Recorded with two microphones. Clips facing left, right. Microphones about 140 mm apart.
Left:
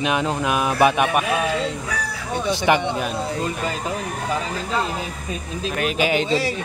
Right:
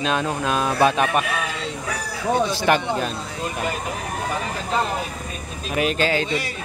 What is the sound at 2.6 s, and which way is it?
Speech, 15° left (ahead or behind).